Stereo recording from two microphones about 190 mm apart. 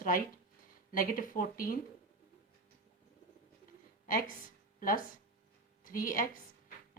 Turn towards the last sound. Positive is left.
turn(degrees=45)  # may be behind; listen again after turning